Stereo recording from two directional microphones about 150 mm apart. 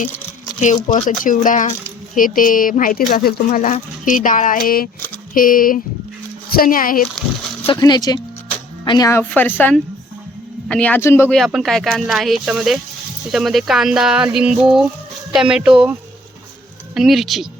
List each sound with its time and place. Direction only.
0.9 s speech: 60° left (ahead or behind)
7.8 s speech: 25° left (ahead or behind)
11.3 s speech: centre (ahead or behind)